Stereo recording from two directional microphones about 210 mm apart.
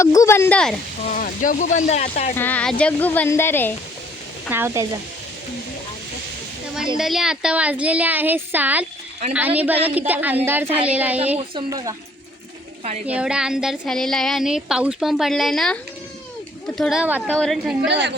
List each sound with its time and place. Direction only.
0.0 s speech: 15° left (ahead or behind)
1.1 s speech: 40° left (ahead or behind)
2.3 s speech: 10° left (ahead or behind)
4.4 s a woman's voice: 10° right (ahead or behind)
6.9 s a woman's voice: centre (ahead or behind)
11.3 s speech: 20° right (ahead or behind)
13.1 s a woman's voice: 5° right (ahead or behind)
17.8 s a woman's voice: 55° right (ahead or behind)